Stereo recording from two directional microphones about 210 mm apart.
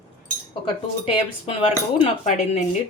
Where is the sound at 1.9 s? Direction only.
30° left (ahead or behind).